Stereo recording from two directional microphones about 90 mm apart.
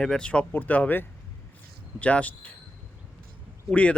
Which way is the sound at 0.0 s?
10° left (ahead or behind).